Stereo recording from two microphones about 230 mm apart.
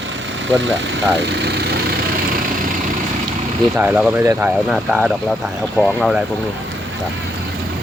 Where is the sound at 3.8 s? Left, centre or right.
Centre.